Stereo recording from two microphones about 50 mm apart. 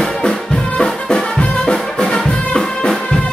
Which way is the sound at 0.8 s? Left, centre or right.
Centre.